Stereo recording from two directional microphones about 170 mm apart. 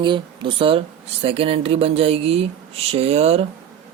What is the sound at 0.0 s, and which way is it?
Speech, 30° right (ahead or behind).